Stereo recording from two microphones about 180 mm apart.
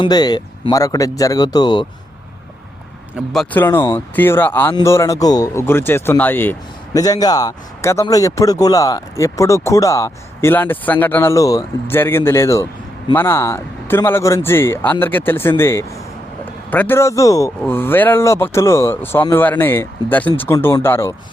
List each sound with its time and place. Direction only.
0.0 s speech: 20° left (ahead or behind)
3.5 s speech: 10° left (ahead or behind)